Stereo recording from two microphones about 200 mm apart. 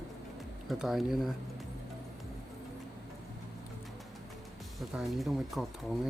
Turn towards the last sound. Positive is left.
turn(degrees=0)  # may be behind; listen again after turning